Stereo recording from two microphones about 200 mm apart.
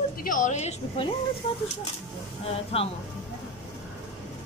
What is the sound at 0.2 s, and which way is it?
Speech, 40° left (ahead or behind).